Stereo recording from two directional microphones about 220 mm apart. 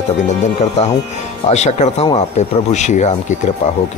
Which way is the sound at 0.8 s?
30° left (ahead or behind).